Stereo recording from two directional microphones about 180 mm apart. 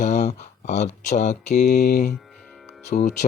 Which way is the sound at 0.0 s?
40° left (ahead or behind).